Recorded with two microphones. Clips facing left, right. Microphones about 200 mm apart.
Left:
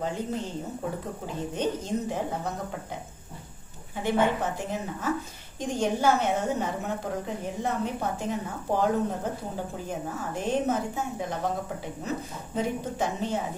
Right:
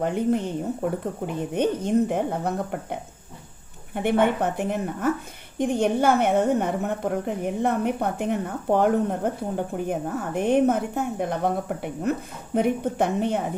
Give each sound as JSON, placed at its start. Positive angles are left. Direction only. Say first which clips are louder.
{"t": 0.0, "sound": "a woman's voice", "louder": "right 8 dB", "side_deg": -60}